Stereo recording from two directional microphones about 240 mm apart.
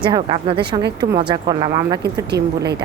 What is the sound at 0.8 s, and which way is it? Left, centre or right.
Speech, right.